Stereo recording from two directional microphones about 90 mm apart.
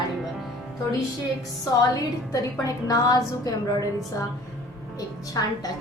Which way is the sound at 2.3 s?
40° left (ahead or behind).